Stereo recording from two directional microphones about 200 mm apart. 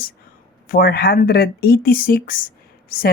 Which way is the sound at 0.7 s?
45° left (ahead or behind).